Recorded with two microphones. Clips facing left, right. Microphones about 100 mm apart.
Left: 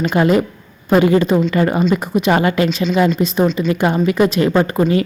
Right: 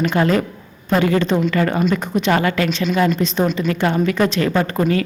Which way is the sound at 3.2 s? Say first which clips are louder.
Left 3 dB; 5° left (ahead or behind).